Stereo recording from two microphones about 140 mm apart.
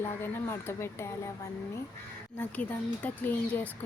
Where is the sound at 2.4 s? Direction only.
10° left (ahead or behind).